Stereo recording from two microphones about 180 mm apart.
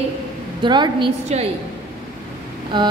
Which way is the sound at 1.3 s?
40° right (ahead or behind).